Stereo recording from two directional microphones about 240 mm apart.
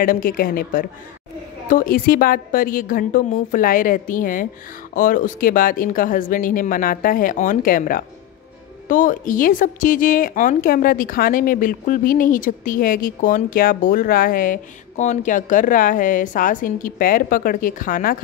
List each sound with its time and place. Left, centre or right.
0.0 s speech: left